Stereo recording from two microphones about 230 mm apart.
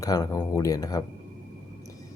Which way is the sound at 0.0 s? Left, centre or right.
Centre.